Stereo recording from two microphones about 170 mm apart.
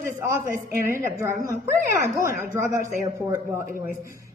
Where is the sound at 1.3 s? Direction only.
55° right (ahead or behind).